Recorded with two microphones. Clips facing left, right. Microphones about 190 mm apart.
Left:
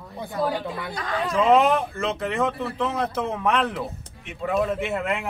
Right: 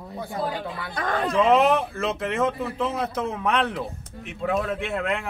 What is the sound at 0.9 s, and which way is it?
Speech, 50° right (ahead or behind).